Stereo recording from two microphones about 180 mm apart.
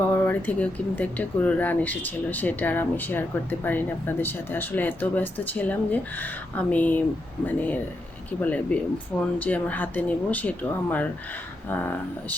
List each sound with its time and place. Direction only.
0.1 s speech: 10° left (ahead or behind)